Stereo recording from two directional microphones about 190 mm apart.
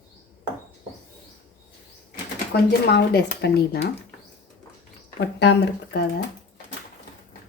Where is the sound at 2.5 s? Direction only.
60° left (ahead or behind).